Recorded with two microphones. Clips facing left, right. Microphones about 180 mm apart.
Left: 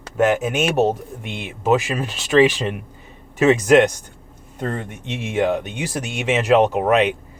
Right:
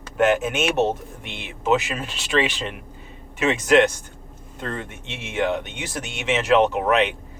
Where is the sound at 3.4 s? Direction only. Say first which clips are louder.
Left 4 dB; 40° left (ahead or behind).